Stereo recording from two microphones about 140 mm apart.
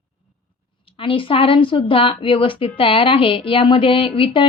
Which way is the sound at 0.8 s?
40° left (ahead or behind).